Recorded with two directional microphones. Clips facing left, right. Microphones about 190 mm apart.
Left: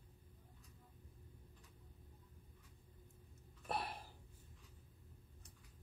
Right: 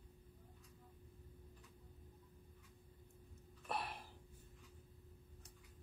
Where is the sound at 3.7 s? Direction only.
35° left (ahead or behind).